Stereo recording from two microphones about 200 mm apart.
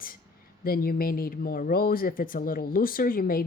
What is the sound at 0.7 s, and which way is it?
Speech, 45° left (ahead or behind).